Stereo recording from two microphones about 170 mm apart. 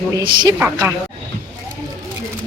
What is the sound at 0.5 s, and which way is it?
Speech, 10° right (ahead or behind).